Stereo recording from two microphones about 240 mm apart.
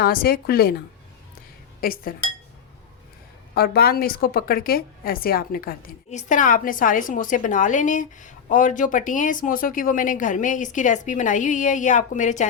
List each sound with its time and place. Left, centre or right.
0.0 s a woman's voice: left
1.8 s a woman's voice: left
3.5 s a woman's voice: left